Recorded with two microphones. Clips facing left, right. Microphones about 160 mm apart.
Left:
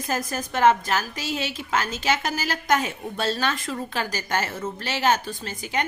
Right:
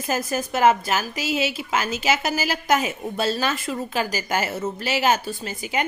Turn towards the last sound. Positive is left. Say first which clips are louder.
# right 2 dB
turn(degrees=-10)  # may be behind; listen again after turning